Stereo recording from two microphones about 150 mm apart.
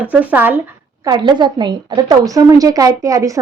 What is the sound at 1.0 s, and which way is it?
A woman's voice, 30° right (ahead or behind).